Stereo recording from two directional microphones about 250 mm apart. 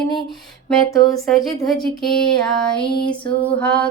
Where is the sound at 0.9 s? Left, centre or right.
Centre.